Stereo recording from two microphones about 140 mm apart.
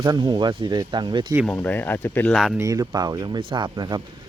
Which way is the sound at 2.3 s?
Centre (ahead or behind).